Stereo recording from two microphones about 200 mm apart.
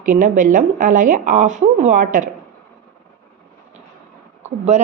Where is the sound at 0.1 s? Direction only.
40° right (ahead or behind).